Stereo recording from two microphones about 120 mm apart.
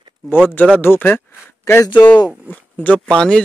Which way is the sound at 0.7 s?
15° left (ahead or behind).